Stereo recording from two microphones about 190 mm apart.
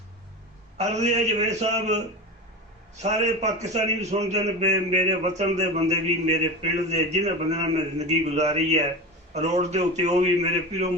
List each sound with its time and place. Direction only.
0.8 s a man's voice: 35° right (ahead or behind)